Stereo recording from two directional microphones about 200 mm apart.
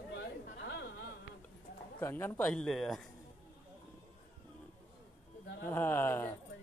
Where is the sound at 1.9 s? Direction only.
10° left (ahead or behind).